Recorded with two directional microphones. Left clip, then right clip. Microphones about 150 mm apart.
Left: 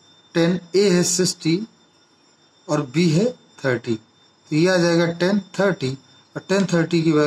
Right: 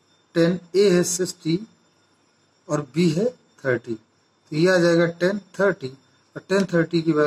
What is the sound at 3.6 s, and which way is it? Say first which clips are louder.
A man's voice: left 2 dB; 45° left (ahead or behind).